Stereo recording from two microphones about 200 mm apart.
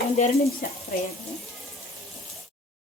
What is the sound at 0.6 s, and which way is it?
Frying, 45° left (ahead or behind).